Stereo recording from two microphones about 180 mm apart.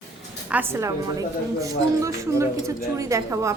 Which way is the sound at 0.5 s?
15° right (ahead or behind).